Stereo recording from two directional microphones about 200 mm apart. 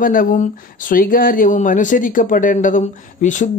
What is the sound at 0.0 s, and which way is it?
Speech, 45° left (ahead or behind).